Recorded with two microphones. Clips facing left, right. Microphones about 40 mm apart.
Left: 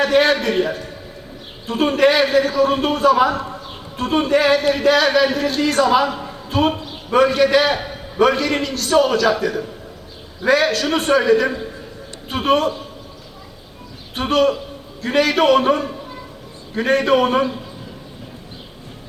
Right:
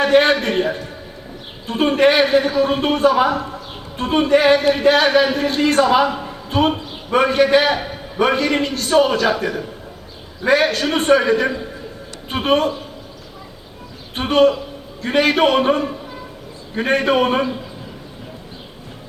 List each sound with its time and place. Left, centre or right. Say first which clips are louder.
0.0 s a sound: right 1 dB; right
0.4 s a man's voice: even; right
1.6 s a man's voice: right 1 dB; right
10.8 s a man's voice: right 2 dB; right
14.2 s a man's voice: right 2 dB; right